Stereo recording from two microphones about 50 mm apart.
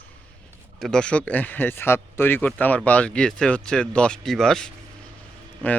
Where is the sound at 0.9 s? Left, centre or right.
Left.